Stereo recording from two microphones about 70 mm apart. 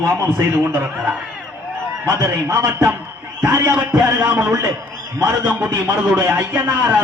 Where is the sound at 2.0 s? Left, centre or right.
Right.